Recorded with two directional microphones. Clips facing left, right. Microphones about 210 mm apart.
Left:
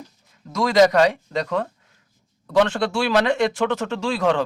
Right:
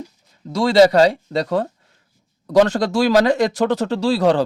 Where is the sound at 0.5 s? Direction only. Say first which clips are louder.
Right 3 dB; 30° right (ahead or behind).